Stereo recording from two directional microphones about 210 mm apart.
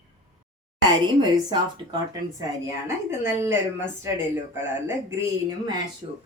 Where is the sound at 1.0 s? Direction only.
20° right (ahead or behind).